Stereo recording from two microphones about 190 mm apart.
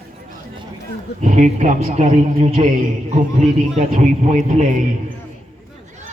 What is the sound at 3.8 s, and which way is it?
A man's voice, 40° right (ahead or behind).